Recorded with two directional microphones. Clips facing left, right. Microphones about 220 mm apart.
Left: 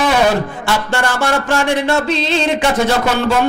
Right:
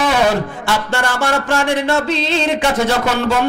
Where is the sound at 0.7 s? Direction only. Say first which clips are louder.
Left 1 dB; 15° left (ahead or behind).